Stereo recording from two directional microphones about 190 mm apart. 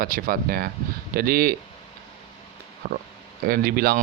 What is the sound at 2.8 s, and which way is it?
Speech, 50° right (ahead or behind).